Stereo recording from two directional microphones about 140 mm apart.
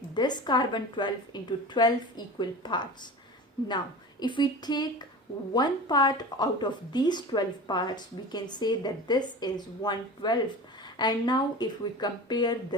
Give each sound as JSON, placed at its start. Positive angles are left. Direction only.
{"t": 0.1, "sound": "speech", "side_deg": 30}
{"t": 4.2, "sound": "speech", "side_deg": 30}